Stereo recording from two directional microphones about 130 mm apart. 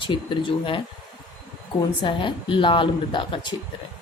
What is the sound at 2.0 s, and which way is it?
A woman's voice, 40° left (ahead or behind).